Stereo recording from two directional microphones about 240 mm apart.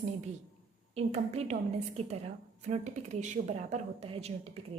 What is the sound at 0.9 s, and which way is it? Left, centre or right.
Speech, right.